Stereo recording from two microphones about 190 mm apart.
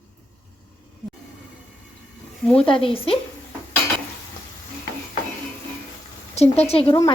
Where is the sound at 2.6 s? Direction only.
30° left (ahead or behind).